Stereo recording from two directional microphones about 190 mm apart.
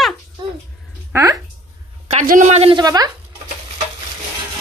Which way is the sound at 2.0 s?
40° right (ahead or behind).